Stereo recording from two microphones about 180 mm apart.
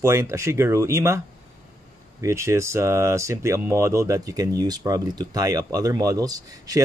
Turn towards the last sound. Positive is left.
turn(degrees=-20)  # may be behind; listen again after turning